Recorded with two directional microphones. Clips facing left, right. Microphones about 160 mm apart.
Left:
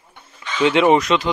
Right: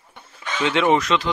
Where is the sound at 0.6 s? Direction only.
15° left (ahead or behind).